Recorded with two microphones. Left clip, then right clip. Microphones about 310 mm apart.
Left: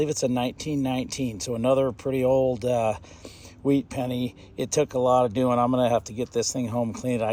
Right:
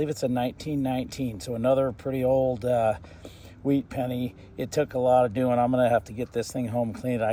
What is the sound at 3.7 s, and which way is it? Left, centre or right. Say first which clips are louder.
Speech: left 1 dB; centre.